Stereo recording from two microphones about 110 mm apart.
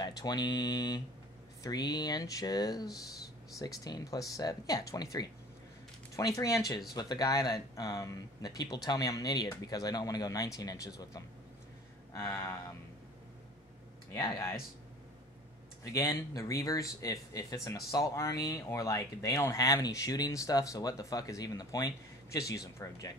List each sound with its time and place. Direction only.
0.0 s speech: 40° left (ahead or behind)
12.1 s a sound: 30° left (ahead or behind)
15.8 s speech: 30° left (ahead or behind)